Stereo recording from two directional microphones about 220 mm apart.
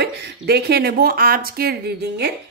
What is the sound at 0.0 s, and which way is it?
A woman's voice, 45° right (ahead or behind).